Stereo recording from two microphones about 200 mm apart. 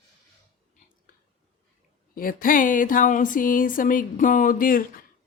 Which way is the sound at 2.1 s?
45° left (ahead or behind).